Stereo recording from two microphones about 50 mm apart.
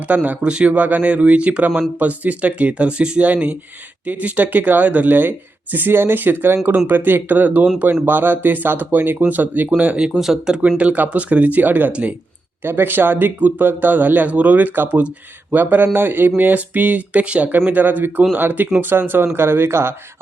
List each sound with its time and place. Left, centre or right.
0.1 s speech: right
10.1 s speech: centre
10.8 s speech: right
11.9 s speech: right
12.6 s speech: right